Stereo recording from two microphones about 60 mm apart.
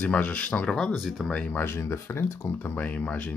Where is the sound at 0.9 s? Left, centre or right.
Centre.